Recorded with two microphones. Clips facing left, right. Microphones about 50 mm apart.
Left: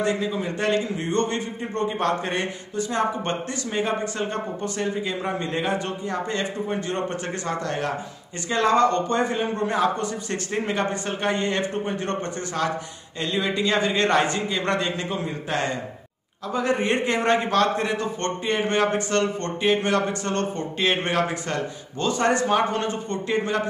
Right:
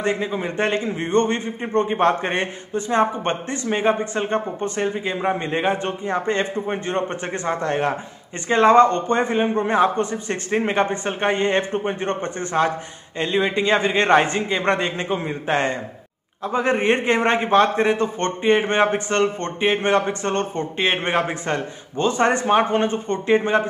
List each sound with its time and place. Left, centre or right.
0.0 s a man's voice: right